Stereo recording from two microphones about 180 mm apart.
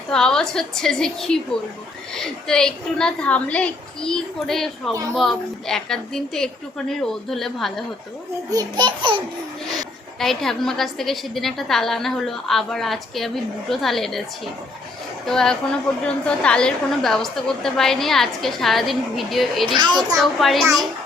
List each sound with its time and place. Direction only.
0.1 s a woman's voice: 5° left (ahead or behind)
8.4 s a child's voice: 25° right (ahead or behind)
10.2 s a woman's voice: centre (ahead or behind)
15.3 s a woman's voice: 5° left (ahead or behind)
19.6 s a child's voice: 25° right (ahead or behind)
20.4 s a woman's voice: centre (ahead or behind)